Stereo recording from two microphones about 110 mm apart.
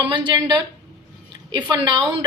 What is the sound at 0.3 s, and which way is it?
A woman's voice, 45° right (ahead or behind).